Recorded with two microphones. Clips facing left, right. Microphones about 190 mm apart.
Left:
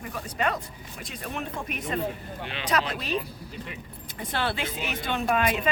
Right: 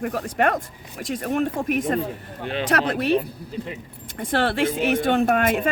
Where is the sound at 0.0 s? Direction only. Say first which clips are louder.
Right 7 dB; 70° right (ahead or behind).